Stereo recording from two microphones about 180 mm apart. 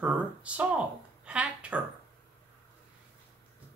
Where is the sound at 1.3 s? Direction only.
5° right (ahead or behind).